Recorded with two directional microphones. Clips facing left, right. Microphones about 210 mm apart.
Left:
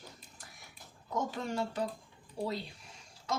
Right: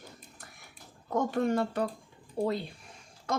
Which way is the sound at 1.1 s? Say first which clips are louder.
Right 8 dB; 60° right (ahead or behind).